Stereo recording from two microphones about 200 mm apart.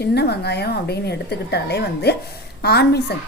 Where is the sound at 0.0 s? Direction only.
55° left (ahead or behind).